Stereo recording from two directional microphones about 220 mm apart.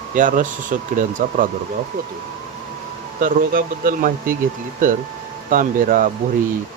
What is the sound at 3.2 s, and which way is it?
Speech, 40° right (ahead or behind).